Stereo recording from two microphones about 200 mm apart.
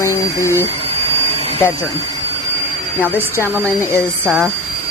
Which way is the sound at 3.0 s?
10° left (ahead or behind).